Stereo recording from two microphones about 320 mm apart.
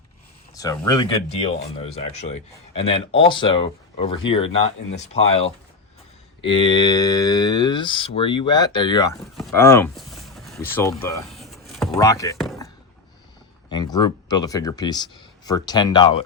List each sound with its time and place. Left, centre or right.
0.5 s speech: centre
9.4 s a sound: centre
13.7 s speech: centre